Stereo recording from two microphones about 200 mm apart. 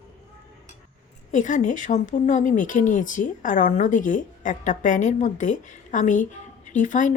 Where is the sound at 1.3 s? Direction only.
40° left (ahead or behind).